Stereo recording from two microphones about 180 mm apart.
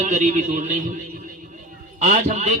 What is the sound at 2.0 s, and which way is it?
Speech, 40° right (ahead or behind).